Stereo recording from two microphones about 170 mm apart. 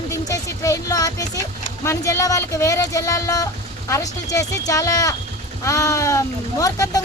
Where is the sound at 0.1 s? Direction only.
20° left (ahead or behind).